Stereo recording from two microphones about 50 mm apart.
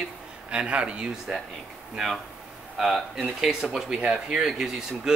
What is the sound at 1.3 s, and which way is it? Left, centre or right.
Speech, centre.